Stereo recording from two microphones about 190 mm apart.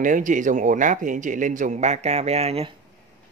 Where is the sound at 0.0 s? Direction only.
45° right (ahead or behind).